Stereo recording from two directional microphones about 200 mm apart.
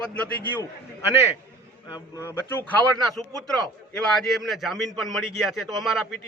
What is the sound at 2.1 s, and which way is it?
Speech, 15° left (ahead or behind).